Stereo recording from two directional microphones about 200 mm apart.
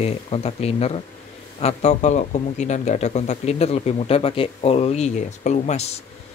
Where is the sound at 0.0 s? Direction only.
30° left (ahead or behind).